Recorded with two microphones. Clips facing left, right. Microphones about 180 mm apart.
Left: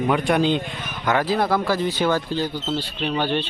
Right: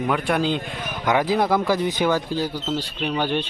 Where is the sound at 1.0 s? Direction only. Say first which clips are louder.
Right 1 dB; 15° right (ahead or behind).